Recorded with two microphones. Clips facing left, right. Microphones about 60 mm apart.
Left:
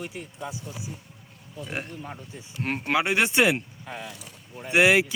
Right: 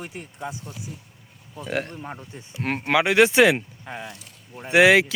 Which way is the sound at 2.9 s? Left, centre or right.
Right.